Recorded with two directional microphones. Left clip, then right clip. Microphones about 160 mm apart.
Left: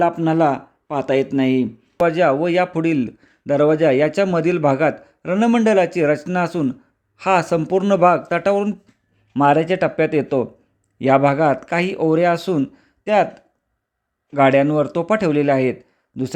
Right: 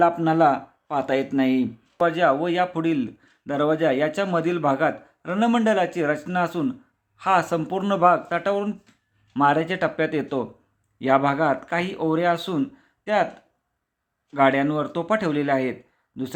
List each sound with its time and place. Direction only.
0.0 s speech: 25° left (ahead or behind); by 13.2 s 40° left (ahead or behind)
14.3 s speech: 40° left (ahead or behind)